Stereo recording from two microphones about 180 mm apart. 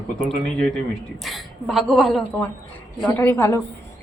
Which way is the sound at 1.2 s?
Centre (ahead or behind).